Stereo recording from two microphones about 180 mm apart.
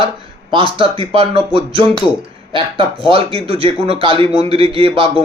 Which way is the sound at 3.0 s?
30° right (ahead or behind).